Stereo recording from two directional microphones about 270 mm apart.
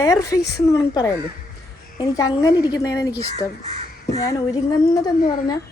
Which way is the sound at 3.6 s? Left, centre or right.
Right.